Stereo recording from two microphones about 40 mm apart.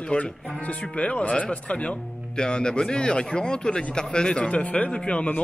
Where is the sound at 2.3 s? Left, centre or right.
Left.